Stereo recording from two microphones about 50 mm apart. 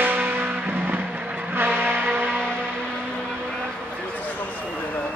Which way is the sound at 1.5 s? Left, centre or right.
Right.